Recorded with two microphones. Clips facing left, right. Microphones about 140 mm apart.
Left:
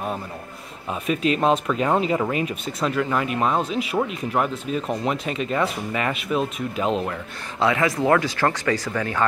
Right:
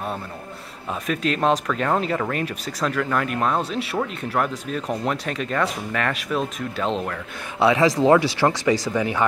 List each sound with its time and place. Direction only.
1.0 s speech: 5° left (ahead or behind)
7.5 s speech: 15° right (ahead or behind)